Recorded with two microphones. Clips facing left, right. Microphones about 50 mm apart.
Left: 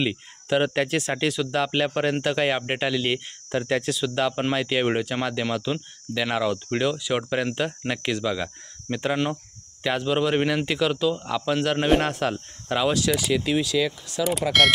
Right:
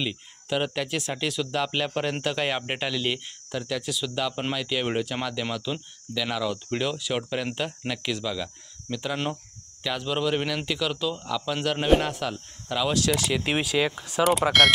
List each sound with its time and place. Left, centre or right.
0.0 s speech: centre
0.8 s speech: left
1.4 s speech: centre
3.5 s speech: left
4.0 s speech: centre
6.5 s speech: centre
8.9 s speech: left
9.8 s speech: centre
12.1 s speech: left
13.1 s speech: centre
13.5 s speech: right
14.6 s speech: centre